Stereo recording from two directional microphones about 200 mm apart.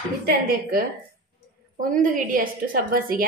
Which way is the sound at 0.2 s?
45° right (ahead or behind).